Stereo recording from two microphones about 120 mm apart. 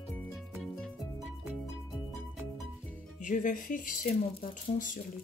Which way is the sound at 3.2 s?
90° left.